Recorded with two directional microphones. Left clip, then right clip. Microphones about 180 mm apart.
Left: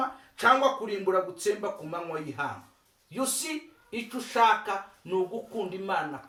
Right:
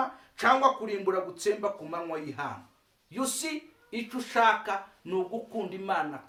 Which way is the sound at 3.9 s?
15° right (ahead or behind).